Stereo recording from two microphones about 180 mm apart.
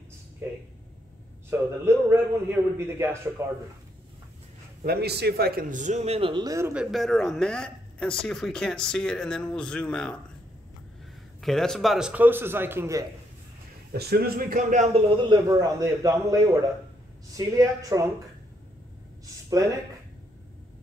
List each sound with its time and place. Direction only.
1.5 s a man's voice: 15° right (ahead or behind)
4.8 s a man's voice: 60° right (ahead or behind); by 6.7 s 20° right (ahead or behind)
6.7 s speech: 5° right (ahead or behind)
11.4 s a man's voice: centre (ahead or behind); by 13.0 s 15° right (ahead or behind)
13.9 s a man's voice: 60° right (ahead or behind); by 14.9 s 45° right (ahead or behind)
15.2 s a man's voice: 20° right (ahead or behind)